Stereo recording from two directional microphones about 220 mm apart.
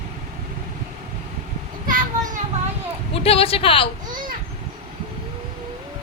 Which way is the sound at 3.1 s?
25° left (ahead or behind).